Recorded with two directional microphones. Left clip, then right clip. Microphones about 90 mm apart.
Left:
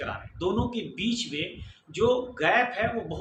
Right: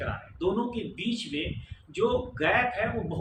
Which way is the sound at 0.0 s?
30° left (ahead or behind).